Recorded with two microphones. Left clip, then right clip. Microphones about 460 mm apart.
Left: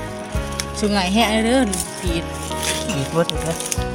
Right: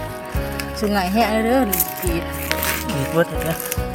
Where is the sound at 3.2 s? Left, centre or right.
Right.